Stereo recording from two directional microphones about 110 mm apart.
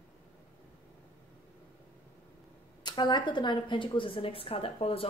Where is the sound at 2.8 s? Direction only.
40° left (ahead or behind).